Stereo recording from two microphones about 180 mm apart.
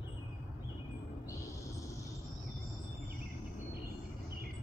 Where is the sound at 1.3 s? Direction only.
15° left (ahead or behind).